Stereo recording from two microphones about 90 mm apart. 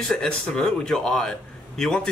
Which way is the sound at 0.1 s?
5° left (ahead or behind).